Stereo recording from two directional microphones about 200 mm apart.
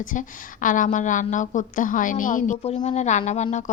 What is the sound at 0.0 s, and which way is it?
A woman's voice, 40° left (ahead or behind).